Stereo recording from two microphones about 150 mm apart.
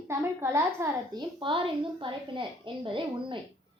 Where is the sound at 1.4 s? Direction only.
35° right (ahead or behind).